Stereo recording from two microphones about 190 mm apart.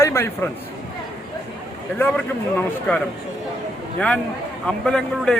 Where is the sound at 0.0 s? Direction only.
15° left (ahead or behind).